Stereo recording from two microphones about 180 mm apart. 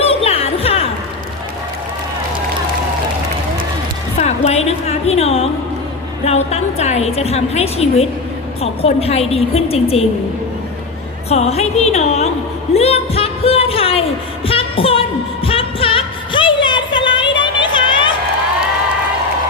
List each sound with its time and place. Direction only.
0.0 s music: 35° left (ahead or behind)
4.2 s music: 35° left (ahead or behind)
6.2 s a woman's voice: 35° left (ahead or behind)
11.3 s a woman's voice: 35° left (ahead or behind)
12.7 s a sound: 35° left (ahead or behind)
14.4 s music: 30° left (ahead or behind)